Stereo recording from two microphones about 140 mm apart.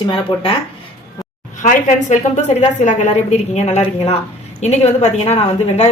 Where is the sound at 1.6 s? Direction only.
65° left (ahead or behind).